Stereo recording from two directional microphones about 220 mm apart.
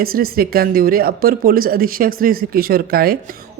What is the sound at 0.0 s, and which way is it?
Speech, 40° right (ahead or behind).